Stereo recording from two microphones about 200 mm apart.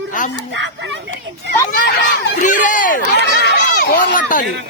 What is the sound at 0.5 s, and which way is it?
Speech, 65° right (ahead or behind).